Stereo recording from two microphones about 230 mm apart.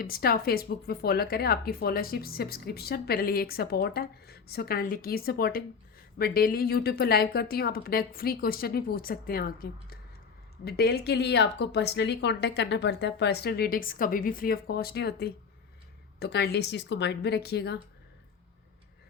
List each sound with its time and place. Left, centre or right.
0.0 s speech: left